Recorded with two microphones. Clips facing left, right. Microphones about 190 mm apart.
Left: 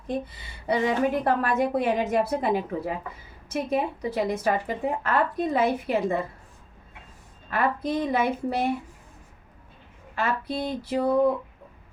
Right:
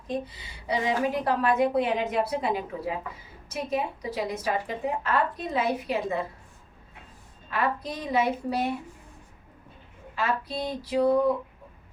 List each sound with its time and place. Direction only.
0.3 s speech: 55° left (ahead or behind)
7.5 s speech: 55° left (ahead or behind)
10.2 s speech: 50° left (ahead or behind)